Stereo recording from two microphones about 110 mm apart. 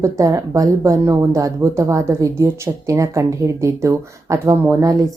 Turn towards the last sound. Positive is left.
turn(degrees=-25)  # may be behind; listen again after turning